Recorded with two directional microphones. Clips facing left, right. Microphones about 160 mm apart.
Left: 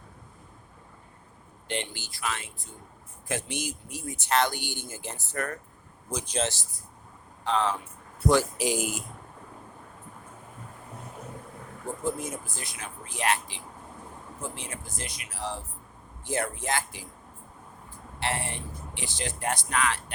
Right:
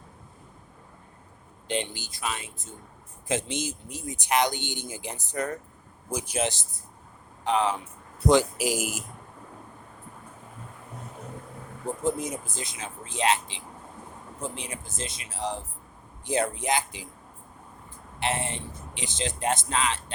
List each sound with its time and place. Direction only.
1.6 s speech: 15° right (ahead or behind)
8.5 s speech: 5° right (ahead or behind)
12.0 s speech: 20° right (ahead or behind)
18.2 s speech: 20° right (ahead or behind)